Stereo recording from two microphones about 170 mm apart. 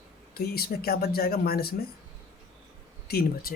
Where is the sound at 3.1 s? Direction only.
65° left (ahead or behind).